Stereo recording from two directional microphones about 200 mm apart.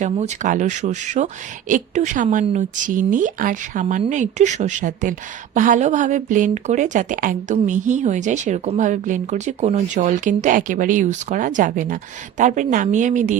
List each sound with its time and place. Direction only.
0.0 s speech: 40° right (ahead or behind)